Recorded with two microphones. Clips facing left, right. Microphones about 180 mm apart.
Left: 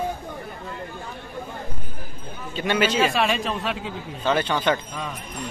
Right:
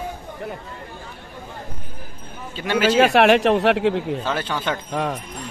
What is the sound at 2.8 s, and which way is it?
Speech, 65° right (ahead or behind).